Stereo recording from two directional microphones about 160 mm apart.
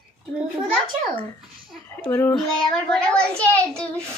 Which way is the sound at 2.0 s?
15° left (ahead or behind).